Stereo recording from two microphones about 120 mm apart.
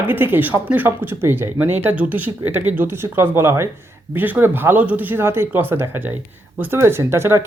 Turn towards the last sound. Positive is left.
turn(degrees=-20)  # may be behind; listen again after turning